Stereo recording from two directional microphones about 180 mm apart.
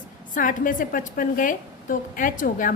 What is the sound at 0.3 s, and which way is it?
A woman's voice, 50° left (ahead or behind).